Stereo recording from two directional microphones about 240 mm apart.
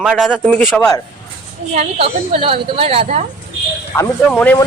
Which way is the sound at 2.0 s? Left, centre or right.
Right.